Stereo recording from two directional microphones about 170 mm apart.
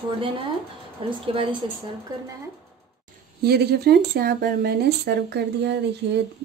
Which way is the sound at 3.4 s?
70° right (ahead or behind).